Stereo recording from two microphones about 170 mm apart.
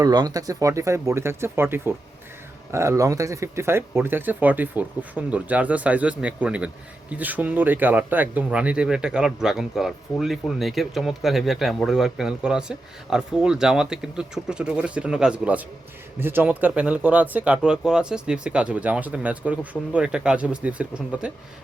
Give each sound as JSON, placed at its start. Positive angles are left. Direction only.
{"t": 0.0, "sound": "speech", "side_deg": -25}